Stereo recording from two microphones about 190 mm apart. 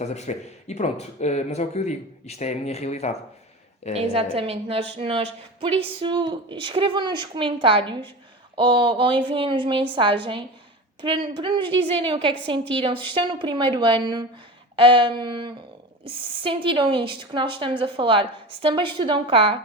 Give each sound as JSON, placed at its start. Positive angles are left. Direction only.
{"t": 0.0, "sound": "speech", "side_deg": 35}
{"t": 3.9, "sound": "a woman's voice", "side_deg": -30}